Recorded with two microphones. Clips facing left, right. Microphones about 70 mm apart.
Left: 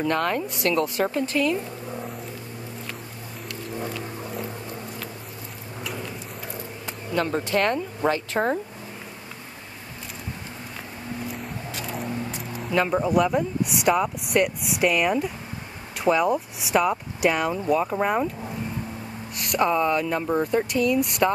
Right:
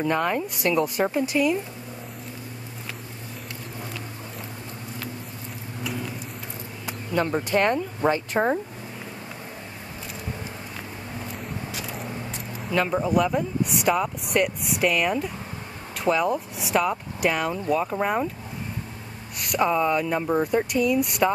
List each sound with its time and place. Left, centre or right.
0.0 s speech: centre
7.2 s speech: centre
11.3 s speech: centre
19.3 s speech: centre